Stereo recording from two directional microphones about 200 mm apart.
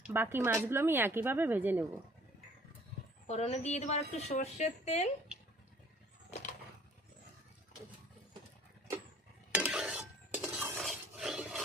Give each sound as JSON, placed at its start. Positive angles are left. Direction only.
{"t": 0.1, "sound": "speech", "side_deg": -10}
{"t": 3.2, "sound": "speech", "side_deg": 30}
{"t": 9.5, "sound": "stir", "side_deg": -5}